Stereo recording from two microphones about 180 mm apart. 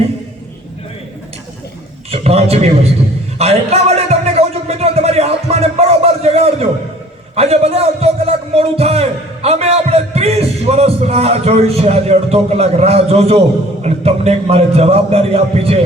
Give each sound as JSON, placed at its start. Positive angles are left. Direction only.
{"t": 2.0, "sound": "a man's voice", "side_deg": -35}
{"t": 3.3, "sound": "a sound", "side_deg": -35}
{"t": 7.3, "sound": "a man's voice", "side_deg": -35}